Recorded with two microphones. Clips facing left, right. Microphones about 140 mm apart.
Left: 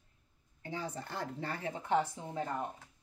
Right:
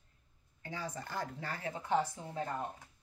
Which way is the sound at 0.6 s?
25° left (ahead or behind).